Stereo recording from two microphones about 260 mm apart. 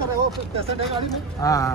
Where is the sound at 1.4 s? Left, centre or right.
Centre.